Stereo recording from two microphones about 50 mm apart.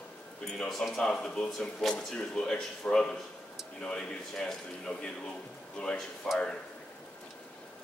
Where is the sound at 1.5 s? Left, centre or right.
Centre.